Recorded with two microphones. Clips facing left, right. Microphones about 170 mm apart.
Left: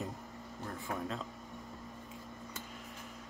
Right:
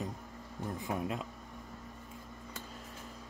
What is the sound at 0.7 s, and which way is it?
Speech, 15° right (ahead or behind).